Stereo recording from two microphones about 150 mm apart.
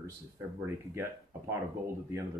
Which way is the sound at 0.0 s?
15° right (ahead or behind).